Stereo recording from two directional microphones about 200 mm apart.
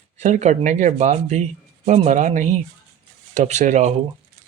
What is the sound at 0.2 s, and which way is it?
Speech, 35° right (ahead or behind).